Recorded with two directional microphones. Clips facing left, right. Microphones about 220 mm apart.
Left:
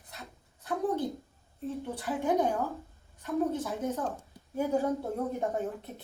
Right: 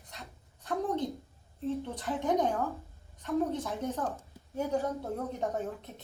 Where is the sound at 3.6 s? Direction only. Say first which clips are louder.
Left 1 dB; 10° left (ahead or behind).